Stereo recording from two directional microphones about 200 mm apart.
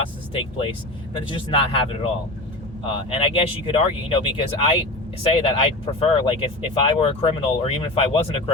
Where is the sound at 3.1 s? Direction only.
25° left (ahead or behind).